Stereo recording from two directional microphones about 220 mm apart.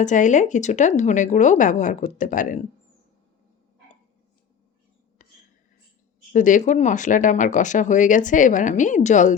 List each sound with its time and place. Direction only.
0.0 s speech: 35° left (ahead or behind)
6.3 s speech: 35° left (ahead or behind)